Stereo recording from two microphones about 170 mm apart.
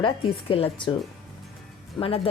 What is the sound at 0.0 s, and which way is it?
Speech, 35° left (ahead or behind).